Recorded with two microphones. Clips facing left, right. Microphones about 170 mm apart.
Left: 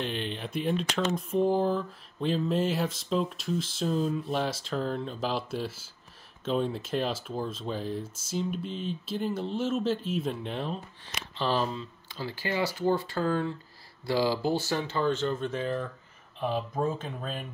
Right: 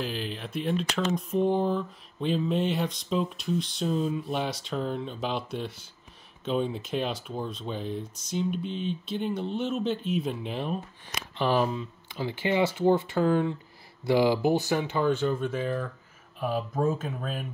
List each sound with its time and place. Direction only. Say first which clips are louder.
0.0 s speech: even; centre (ahead or behind)
11.3 s speech: right 3 dB; 15° right (ahead or behind)